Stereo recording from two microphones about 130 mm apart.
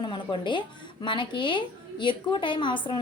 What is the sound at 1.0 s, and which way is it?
A woman's voice, 40° left (ahead or behind).